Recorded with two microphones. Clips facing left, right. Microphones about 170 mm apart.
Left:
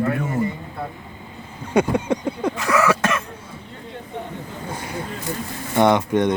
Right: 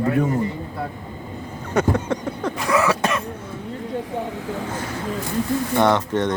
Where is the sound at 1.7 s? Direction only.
10° left (ahead or behind).